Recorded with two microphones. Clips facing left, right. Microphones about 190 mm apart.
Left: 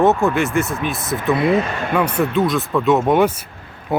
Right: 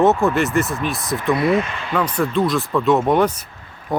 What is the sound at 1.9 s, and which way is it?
Speech, 10° left (ahead or behind).